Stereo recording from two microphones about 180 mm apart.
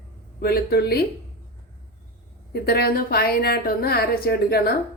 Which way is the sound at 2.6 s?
60° left (ahead or behind).